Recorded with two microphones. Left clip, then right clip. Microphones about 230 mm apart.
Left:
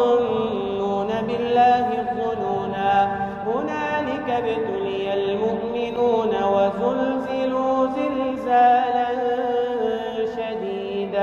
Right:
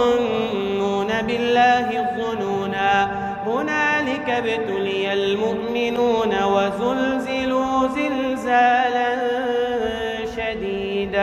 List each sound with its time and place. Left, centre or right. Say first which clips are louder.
0.0 s music: even; right
1.5 s chant: even; right
2.8 s mantra: even; right
3.8 s music: right 3 dB; right
5.9 s a sound: even; right
7.5 s mantra: right 1 dB; right
8.5 s music: even; right